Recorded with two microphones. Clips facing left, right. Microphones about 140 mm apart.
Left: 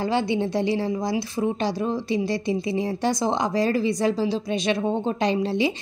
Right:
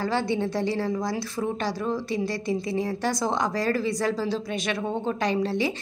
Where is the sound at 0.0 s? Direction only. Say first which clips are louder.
Left 2 dB; 20° left (ahead or behind).